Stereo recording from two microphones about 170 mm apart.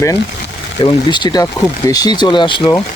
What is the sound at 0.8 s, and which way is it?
Speech, 25° left (ahead or behind).